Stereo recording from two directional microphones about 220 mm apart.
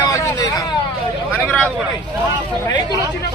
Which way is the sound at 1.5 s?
5° left (ahead or behind).